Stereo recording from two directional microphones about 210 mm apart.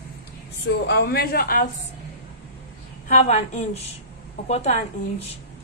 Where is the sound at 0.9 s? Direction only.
50° left (ahead or behind).